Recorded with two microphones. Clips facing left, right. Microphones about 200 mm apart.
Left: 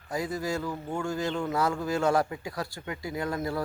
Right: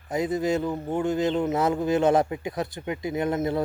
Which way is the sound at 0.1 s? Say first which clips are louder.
Right 6 dB; 20° right (ahead or behind).